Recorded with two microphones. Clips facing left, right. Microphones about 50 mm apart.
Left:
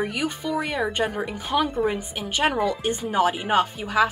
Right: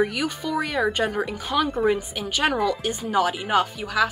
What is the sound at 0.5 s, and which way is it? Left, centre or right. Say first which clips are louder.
Speech: right 3 dB; centre.